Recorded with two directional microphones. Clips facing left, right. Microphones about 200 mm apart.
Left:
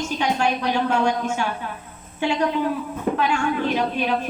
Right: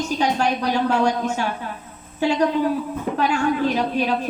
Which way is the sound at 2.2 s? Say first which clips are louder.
Right 3 dB; 35° right (ahead or behind).